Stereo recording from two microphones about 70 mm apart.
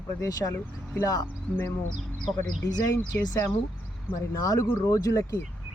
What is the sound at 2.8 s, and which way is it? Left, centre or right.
Speech, left.